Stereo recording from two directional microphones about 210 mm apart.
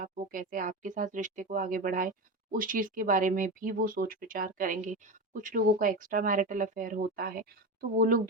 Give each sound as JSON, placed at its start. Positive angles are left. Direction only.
{"t": 0.0, "sound": "speech", "side_deg": -40}